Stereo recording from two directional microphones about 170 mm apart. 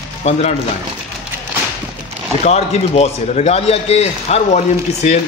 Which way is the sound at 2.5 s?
40° left (ahead or behind).